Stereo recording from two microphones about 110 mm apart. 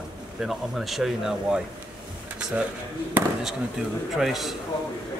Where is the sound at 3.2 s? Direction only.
15° right (ahead or behind).